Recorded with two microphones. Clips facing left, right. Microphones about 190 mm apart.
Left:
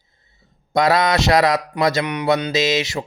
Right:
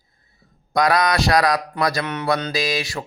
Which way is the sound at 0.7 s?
25° left (ahead or behind).